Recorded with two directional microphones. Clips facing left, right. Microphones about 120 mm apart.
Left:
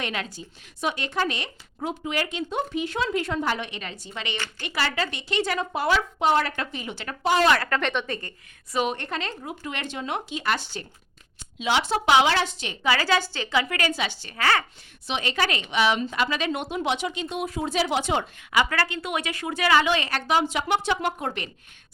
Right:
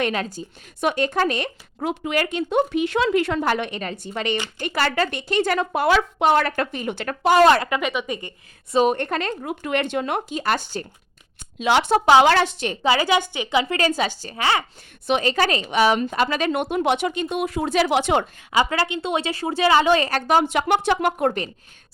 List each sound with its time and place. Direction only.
0.0 s speech: 45° right (ahead or behind)
7.6 s speech: 10° right (ahead or behind)
8.9 s a woman's voice: 55° right (ahead or behind)
11.6 s a woman's voice: 55° right (ahead or behind)
12.8 s a woman's voice: 20° right (ahead or behind)
13.9 s a woman's voice: 40° right (ahead or behind)
14.3 s speech: 20° right (ahead or behind)
15.0 s a woman's voice: 50° right (ahead or behind)
15.3 s a woman's voice: 35° right (ahead or behind); by 18.3 s 65° right (ahead or behind)
18.5 s a woman's voice: 25° right (ahead or behind)
19.9 s speech: 40° right (ahead or behind); by 21.3 s 55° right (ahead or behind)